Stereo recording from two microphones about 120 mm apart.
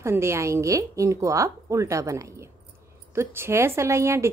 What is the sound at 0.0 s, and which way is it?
A woman's voice, 25° right (ahead or behind).